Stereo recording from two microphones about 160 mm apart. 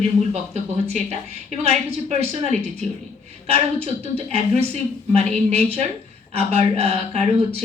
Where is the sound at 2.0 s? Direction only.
40° right (ahead or behind).